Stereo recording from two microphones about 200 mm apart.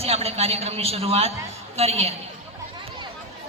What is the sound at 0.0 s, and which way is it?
A man's voice, 30° right (ahead or behind).